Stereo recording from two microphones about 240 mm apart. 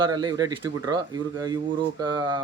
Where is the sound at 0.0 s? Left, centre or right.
Centre.